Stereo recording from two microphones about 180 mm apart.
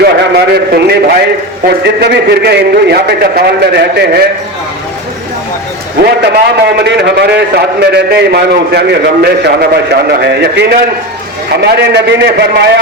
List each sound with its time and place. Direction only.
0.0 s a man's voice: 65° right (ahead or behind)
6.0 s a man's voice: 60° right (ahead or behind)